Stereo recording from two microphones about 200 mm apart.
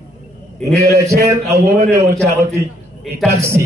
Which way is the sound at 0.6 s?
15° right (ahead or behind).